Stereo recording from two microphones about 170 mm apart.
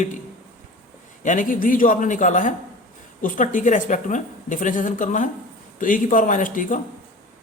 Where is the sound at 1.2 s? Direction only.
50° left (ahead or behind).